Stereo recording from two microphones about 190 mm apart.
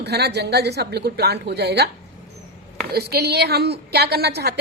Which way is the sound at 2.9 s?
55° right (ahead or behind).